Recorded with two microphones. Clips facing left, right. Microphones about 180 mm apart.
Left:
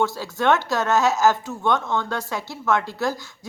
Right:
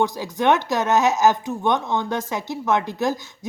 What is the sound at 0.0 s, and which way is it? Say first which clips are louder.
Speech: right 1 dB; 15° right (ahead or behind).